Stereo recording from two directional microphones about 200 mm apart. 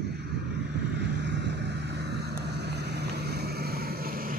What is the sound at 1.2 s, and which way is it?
Vehicle, 60° right (ahead or behind).